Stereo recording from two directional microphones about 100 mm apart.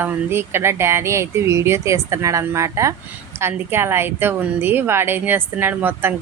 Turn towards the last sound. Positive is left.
turn(degrees=-20)  # may be behind; listen again after turning